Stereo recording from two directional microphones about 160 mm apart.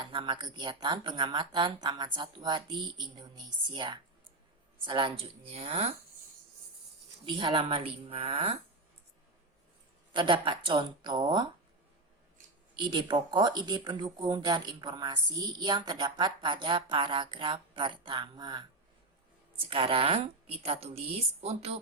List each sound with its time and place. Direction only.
0.0 s speech: 30° right (ahead or behind)
7.3 s speech: 30° right (ahead or behind)
10.1 s speech: 30° right (ahead or behind)
12.8 s speech: 25° right (ahead or behind)
19.6 s speech: 35° right (ahead or behind)